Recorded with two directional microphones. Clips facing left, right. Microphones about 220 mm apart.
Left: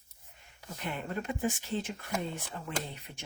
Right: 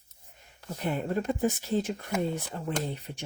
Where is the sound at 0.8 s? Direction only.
40° right (ahead or behind).